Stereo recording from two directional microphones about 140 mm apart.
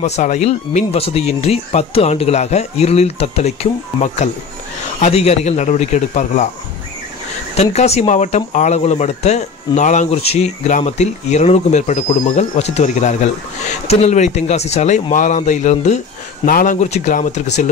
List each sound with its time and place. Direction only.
0.0 s speech: 55° left (ahead or behind)
5.0 s speech: 50° left (ahead or behind)
7.5 s speech: 50° left (ahead or behind)
16.4 s speech: 75° left (ahead or behind); by 17.6 s 55° left (ahead or behind)